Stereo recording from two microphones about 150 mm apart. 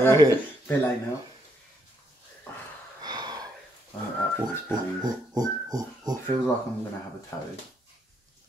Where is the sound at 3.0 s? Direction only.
25° right (ahead or behind).